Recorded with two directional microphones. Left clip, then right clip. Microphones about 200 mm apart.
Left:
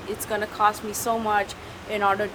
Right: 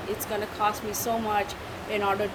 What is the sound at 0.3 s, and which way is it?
Speech, 15° left (ahead or behind).